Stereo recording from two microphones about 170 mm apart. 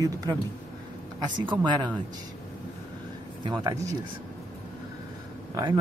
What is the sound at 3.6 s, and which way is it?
Speech, 20° right (ahead or behind).